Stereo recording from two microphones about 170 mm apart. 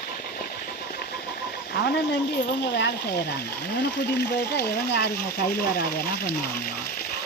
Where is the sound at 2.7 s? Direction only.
90° left; by 6.7 s 70° left (ahead or behind).